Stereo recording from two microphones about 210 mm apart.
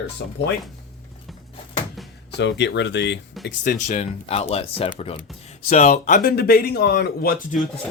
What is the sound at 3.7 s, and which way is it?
Speech, 35° left (ahead or behind).